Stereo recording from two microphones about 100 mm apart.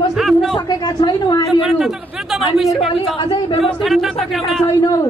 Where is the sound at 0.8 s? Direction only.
45° left (ahead or behind).